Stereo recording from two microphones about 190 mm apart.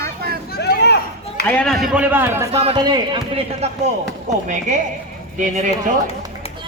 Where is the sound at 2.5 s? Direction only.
30° right (ahead or behind).